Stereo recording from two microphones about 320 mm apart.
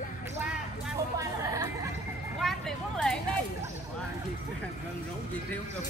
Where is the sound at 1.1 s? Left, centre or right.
Centre.